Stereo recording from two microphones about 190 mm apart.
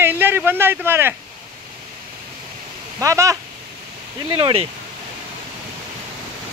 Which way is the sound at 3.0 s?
15° right (ahead or behind).